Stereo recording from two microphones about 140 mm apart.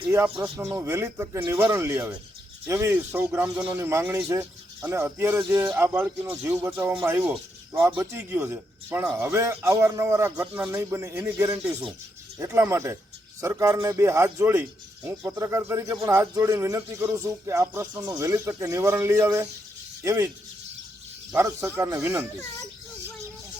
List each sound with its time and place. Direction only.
0.1 s speech: 20° right (ahead or behind)
21.3 s speech: 15° right (ahead or behind)